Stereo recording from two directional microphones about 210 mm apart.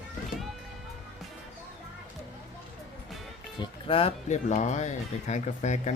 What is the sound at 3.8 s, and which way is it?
Speech, 25° left (ahead or behind).